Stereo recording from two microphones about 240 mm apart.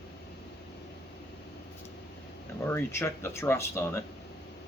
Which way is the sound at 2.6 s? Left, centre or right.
Centre.